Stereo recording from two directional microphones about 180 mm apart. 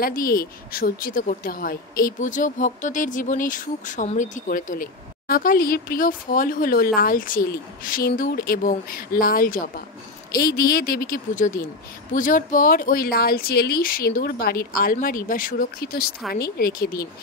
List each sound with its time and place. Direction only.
0.0 s a woman's voice: 55° left (ahead or behind)